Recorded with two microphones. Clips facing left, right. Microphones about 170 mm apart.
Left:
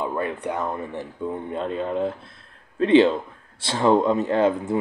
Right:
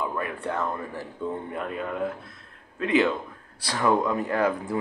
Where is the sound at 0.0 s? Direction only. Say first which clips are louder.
Left 4 dB; 25° left (ahead or behind).